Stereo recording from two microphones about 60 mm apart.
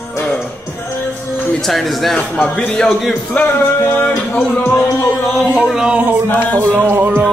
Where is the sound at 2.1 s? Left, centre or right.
Centre.